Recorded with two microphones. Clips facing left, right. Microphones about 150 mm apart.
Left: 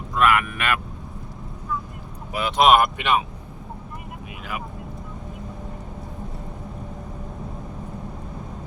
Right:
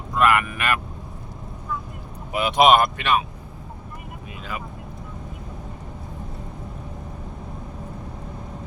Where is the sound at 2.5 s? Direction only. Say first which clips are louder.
Even; centre (ahead or behind).